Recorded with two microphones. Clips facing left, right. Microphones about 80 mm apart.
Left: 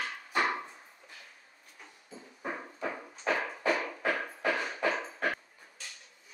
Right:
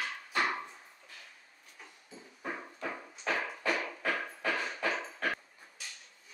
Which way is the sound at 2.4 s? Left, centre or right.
Centre.